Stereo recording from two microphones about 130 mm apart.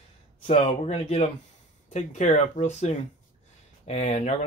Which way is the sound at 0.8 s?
60° left (ahead or behind).